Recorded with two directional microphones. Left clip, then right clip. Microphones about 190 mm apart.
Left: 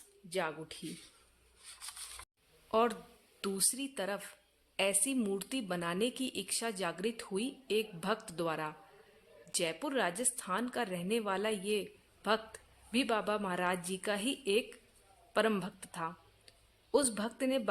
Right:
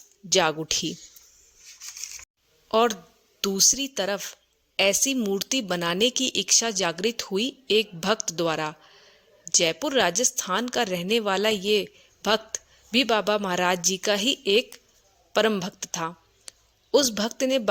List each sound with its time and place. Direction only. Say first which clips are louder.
0.3 s speech: right 15 dB; 45° right (ahead or behind)
2.6 s a woman's voice: right 9 dB; 30° right (ahead or behind)